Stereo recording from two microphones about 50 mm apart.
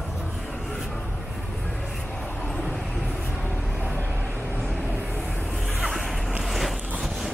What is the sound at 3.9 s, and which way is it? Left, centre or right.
Vehicle, right.